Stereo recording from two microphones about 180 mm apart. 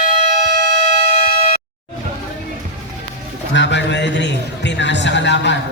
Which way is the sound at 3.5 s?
80° left.